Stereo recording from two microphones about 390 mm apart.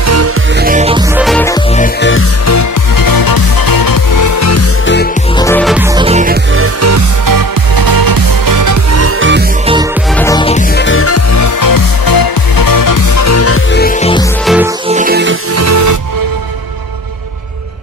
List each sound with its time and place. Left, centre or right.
0.0 s music: right
0.6 s music: centre
1.1 s music: centre
1.8 s music: left
2.4 s music: left
5.4 s music: centre
5.9 s music: centre
6.5 s music: right
10.1 s music: centre
10.8 s music: left
13.7 s music: centre
14.4 s music: centre
14.9 s music: right
15.5 s music: right